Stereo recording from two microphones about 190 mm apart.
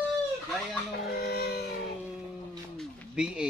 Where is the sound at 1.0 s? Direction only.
55° left (ahead or behind).